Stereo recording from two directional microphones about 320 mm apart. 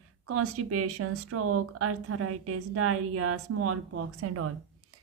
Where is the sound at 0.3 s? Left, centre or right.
Right.